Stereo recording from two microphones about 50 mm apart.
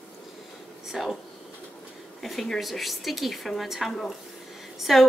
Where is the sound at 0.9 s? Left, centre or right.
Centre.